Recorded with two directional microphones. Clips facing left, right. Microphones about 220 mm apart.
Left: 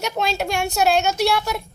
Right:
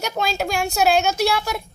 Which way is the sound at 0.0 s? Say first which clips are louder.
Even; centre (ahead or behind).